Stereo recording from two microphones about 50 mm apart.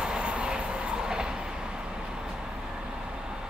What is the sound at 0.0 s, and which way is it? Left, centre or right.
Train, centre.